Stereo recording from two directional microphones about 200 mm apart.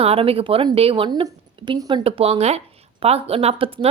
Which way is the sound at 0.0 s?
30° right (ahead or behind).